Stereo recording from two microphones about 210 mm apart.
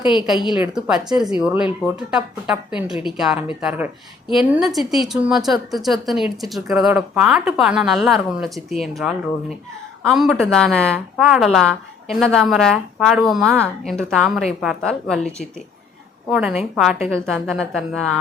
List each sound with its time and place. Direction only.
0.0 s a woman's voice: 20° left (ahead or behind)
0.6 s a woman's voice: 5° right (ahead or behind)